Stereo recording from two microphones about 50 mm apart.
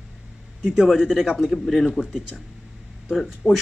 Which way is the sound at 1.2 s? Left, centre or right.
Centre.